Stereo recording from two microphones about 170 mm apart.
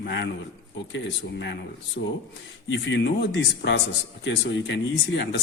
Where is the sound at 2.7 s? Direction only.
90° left.